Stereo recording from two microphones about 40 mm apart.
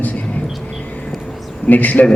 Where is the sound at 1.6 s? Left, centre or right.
Left.